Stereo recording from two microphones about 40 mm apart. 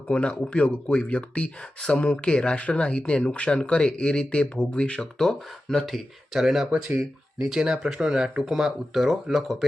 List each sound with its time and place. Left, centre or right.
0.1 s speech: left
4.9 s speech: centre
6.3 s speech: centre
8.4 s speech: centre